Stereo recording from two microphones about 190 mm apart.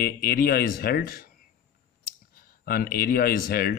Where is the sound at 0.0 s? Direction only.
50° left (ahead or behind).